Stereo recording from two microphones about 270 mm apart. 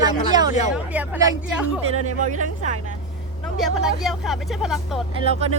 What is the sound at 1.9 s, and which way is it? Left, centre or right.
Speech, right.